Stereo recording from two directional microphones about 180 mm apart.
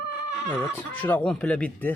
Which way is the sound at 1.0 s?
10° left (ahead or behind).